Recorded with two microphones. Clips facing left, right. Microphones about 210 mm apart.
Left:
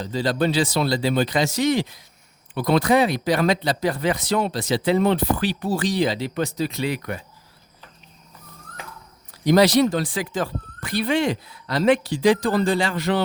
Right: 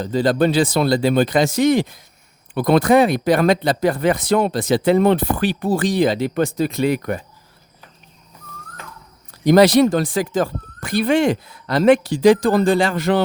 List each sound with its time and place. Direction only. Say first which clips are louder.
0.0 s speech: right 5 dB; 50° right (ahead or behind)
9.4 s speech: right 4 dB; 50° right (ahead or behind)